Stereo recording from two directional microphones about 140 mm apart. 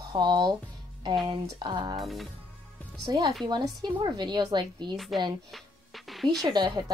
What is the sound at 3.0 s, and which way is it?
Speech, 25° right (ahead or behind).